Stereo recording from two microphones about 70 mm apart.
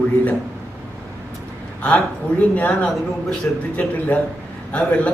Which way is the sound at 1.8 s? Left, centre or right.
Left.